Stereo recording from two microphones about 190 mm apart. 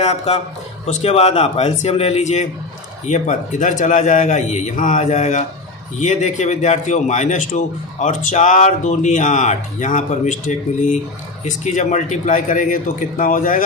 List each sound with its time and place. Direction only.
0.0 s a man's voice: 35° left (ahead or behind)